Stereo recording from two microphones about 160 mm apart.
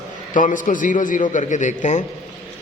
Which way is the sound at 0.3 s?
55° left (ahead or behind).